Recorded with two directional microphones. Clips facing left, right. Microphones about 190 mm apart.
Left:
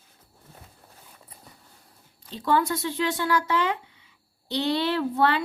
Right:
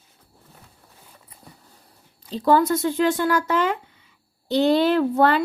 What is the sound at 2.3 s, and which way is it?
A woman's voice, 40° right (ahead or behind).